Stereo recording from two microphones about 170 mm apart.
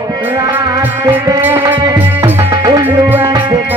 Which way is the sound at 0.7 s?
20° right (ahead or behind).